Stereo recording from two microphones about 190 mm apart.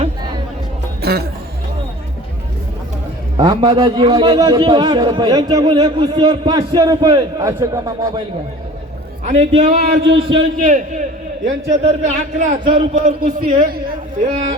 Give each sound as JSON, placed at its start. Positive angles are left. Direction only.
{"t": 1.0, "sound": "speech", "side_deg": -55}
{"t": 3.3, "sound": "a man's voice", "side_deg": -25}
{"t": 9.2, "sound": "a man's voice", "side_deg": -35}
{"t": 10.6, "sound": "a man's voice", "side_deg": -40}